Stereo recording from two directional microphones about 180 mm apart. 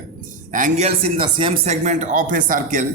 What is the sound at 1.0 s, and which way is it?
Speech, 30° right (ahead or behind).